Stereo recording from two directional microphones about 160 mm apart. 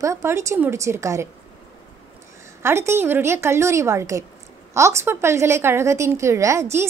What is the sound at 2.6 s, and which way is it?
A woman's voice, 15° right (ahead or behind).